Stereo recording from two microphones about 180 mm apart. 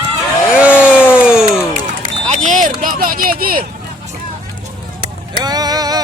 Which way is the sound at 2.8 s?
50° right (ahead or behind).